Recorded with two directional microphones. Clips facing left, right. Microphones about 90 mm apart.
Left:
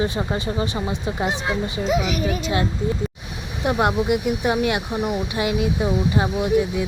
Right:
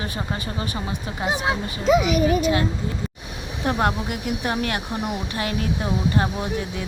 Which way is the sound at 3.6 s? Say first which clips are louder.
Left 3 dB; 15° left (ahead or behind).